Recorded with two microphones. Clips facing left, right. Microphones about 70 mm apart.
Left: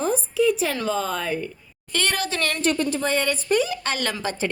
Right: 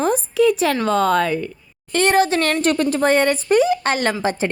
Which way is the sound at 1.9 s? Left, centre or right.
Right.